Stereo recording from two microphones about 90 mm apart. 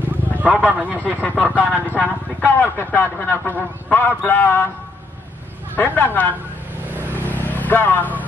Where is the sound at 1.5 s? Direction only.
20° left (ahead or behind).